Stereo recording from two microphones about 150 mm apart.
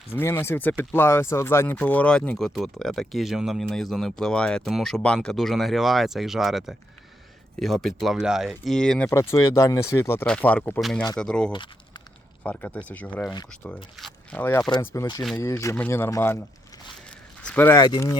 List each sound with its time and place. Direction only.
0.1 s speech: 15° left (ahead or behind)
9.0 s speech: 20° left (ahead or behind)
10.8 s speech: centre (ahead or behind); by 16.4 s 15° left (ahead or behind)
17.4 s speech: 10° left (ahead or behind)
17.8 s speech: 25° left (ahead or behind)